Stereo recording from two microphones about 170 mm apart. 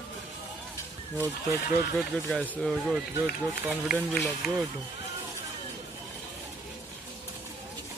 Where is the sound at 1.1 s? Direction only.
15° right (ahead or behind).